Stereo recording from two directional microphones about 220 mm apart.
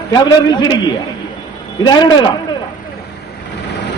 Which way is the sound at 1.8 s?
20° left (ahead or behind).